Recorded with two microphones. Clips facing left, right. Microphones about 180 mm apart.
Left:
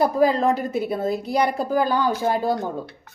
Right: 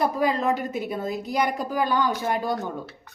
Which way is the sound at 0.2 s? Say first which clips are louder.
Left 5 dB; 35° left (ahead or behind).